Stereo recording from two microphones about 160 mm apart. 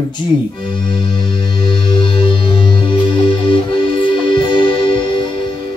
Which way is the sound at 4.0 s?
30° left (ahead or behind).